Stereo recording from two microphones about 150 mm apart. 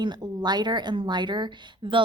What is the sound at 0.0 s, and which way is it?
Speech, 30° right (ahead or behind).